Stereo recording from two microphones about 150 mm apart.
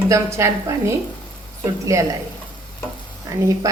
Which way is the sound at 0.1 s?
20° right (ahead or behind).